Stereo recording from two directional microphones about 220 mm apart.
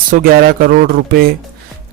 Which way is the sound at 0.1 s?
45° right (ahead or behind).